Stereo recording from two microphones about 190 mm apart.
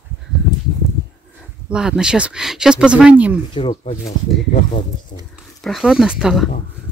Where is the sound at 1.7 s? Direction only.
5° right (ahead or behind).